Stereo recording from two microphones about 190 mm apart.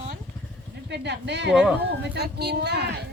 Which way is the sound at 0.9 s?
65° right (ahead or behind).